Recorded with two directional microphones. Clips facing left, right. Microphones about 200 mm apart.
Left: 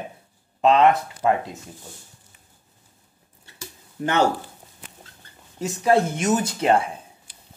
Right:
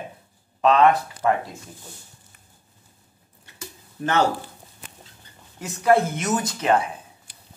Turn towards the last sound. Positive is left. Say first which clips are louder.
# left 1 dB
turn(degrees=30)  # may be behind; listen again after turning